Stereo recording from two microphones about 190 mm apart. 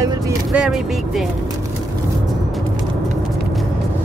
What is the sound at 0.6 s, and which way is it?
Speech, centre (ahead or behind).